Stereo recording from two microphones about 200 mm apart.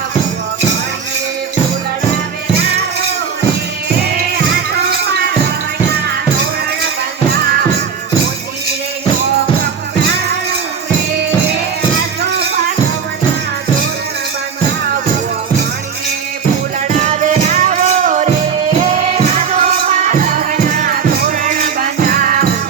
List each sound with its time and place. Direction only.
17.0 s music: 35° right (ahead or behind)
19.5 s music: 30° right (ahead or behind)